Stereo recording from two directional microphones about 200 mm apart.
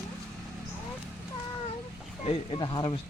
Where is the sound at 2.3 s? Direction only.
25° left (ahead or behind).